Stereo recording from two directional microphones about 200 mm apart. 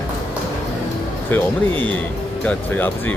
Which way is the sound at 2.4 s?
10° left (ahead or behind).